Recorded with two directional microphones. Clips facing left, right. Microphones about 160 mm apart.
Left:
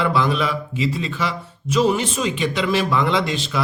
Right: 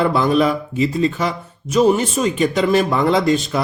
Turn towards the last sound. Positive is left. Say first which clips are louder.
# right 5 dB
turn(degrees=-45)  # may be behind; listen again after turning